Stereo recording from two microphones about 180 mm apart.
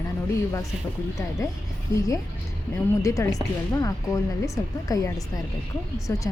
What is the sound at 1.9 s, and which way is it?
Speech, 20° left (ahead or behind).